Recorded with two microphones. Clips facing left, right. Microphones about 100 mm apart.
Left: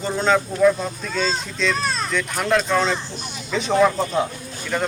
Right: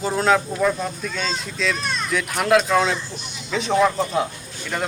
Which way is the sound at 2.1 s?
5° right (ahead or behind).